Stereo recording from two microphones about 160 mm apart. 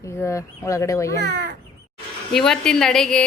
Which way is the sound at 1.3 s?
90° right.